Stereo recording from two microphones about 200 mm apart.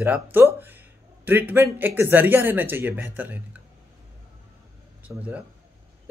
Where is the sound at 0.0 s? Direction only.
10° right (ahead or behind).